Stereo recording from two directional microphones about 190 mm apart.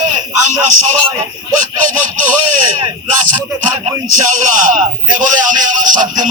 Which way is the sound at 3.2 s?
45° right (ahead or behind).